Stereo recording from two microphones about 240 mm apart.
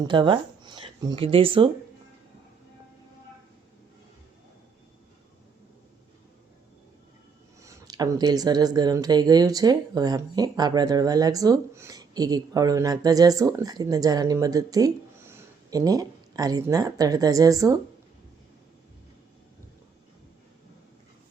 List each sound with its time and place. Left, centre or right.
0.0 s speech: centre
7.6 s speech: centre